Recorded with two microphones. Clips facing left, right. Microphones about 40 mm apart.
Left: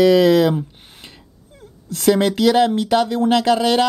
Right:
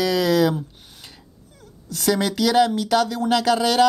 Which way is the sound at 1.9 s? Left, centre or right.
Left.